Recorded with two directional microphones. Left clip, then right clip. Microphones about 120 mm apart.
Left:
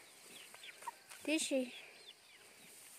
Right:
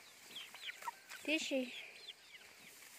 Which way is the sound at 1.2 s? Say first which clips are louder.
Left 1 dB; 40° left (ahead or behind).